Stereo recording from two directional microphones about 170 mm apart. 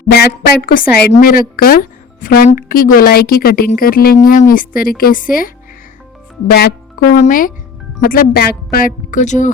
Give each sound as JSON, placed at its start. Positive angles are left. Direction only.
{"t": 0.1, "sound": "a woman's voice", "side_deg": 65}
{"t": 6.5, "sound": "a woman's voice", "side_deg": 70}